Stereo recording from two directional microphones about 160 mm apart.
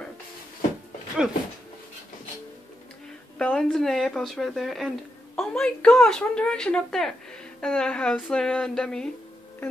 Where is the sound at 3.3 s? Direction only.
5° left (ahead or behind).